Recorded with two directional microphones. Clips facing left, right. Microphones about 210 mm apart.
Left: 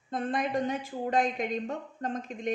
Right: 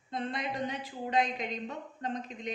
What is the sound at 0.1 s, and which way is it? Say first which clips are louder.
A woman's voice: left 6 dB; 50° left (ahead or behind).